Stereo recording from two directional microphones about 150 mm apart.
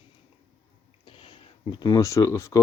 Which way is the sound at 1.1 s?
35° left (ahead or behind).